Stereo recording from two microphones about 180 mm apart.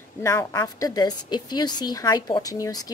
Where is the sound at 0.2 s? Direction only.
15° left (ahead or behind).